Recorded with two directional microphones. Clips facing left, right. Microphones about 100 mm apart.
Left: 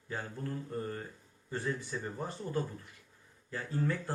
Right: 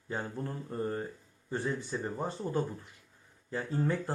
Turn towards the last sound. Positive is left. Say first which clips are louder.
# right 3 dB
turn(degrees=-25)  # may be behind; listen again after turning